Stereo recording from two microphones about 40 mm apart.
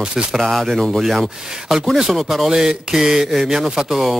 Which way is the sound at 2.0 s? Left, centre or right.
Centre.